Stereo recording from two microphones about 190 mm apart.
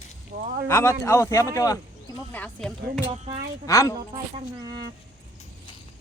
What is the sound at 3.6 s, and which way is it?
Speech, 15° left (ahead or behind).